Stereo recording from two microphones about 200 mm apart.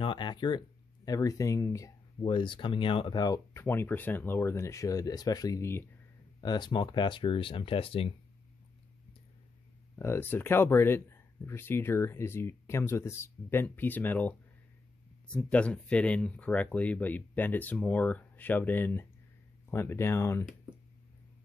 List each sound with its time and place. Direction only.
0.0 s speech: 25° left (ahead or behind)
9.9 s speech: 10° left (ahead or behind)